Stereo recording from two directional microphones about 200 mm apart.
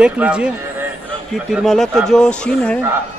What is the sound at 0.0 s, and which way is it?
Speech, 5° right (ahead or behind).